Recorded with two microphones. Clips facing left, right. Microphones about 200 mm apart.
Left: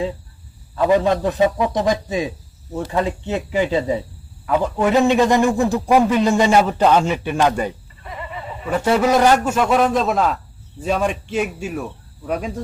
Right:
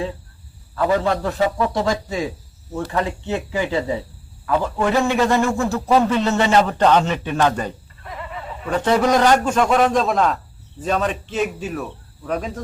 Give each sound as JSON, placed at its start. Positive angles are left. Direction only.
{"t": 0.8, "sound": "a man's voice", "side_deg": 20}